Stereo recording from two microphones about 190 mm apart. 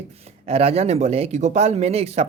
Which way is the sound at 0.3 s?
30° right (ahead or behind).